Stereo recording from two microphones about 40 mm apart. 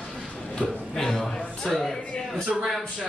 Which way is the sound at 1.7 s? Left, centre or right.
Centre.